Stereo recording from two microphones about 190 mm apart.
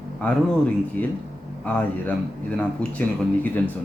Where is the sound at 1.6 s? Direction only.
10° left (ahead or behind).